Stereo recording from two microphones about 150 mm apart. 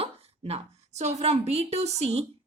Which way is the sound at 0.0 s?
45° right (ahead or behind).